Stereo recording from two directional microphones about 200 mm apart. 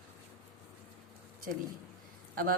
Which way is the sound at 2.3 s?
45° right (ahead or behind).